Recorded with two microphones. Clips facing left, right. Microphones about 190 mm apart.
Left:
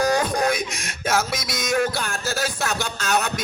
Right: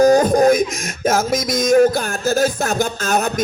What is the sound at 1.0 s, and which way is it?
Music, 50° right (ahead or behind).